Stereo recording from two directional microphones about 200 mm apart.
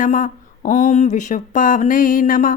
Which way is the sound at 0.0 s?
40° left (ahead or behind).